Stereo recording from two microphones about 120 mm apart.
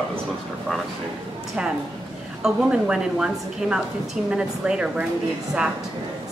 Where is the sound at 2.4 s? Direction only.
5° right (ahead or behind).